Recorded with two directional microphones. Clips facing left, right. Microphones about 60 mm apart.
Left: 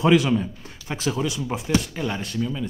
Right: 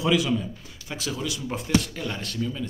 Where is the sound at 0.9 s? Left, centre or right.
Left.